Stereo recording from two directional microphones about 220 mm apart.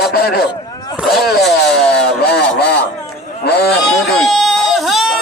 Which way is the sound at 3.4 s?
45° left (ahead or behind).